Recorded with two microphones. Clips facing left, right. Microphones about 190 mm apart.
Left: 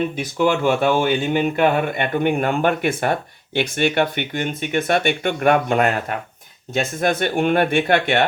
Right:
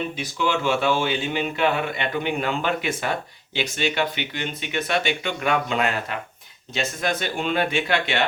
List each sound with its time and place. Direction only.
0.2 s speech: 50° left (ahead or behind)